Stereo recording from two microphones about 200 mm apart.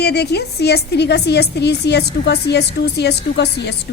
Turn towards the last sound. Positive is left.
turn(degrees=55)  # may be behind; listen again after turning